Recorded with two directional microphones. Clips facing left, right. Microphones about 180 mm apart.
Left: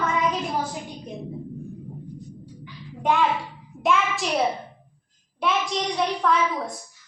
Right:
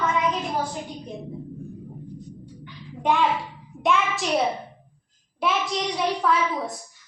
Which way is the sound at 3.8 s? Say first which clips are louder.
Even; centre (ahead or behind).